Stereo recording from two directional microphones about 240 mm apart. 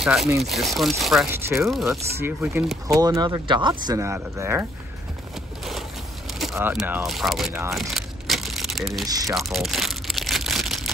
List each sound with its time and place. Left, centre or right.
0.0 s speech: centre
6.5 s speech: centre
9.0 s speech: centre
9.3 s crumpling: centre